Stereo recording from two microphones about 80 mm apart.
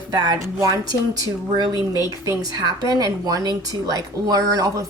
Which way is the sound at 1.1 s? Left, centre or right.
Right.